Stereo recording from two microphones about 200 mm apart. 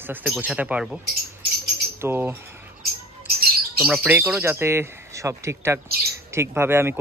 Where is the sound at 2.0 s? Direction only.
10° right (ahead or behind).